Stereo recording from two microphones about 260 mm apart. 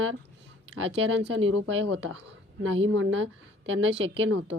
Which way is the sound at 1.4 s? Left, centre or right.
Right.